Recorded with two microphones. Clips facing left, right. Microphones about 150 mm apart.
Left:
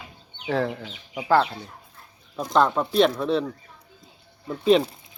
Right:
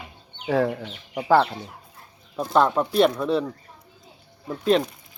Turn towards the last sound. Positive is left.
turn(degrees=0)  # may be behind; listen again after turning